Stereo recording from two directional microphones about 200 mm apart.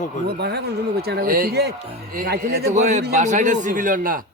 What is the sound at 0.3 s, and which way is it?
Speech, 55° right (ahead or behind).